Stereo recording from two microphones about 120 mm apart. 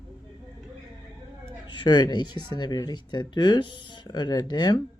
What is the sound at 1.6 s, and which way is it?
Speech, 40° left (ahead or behind).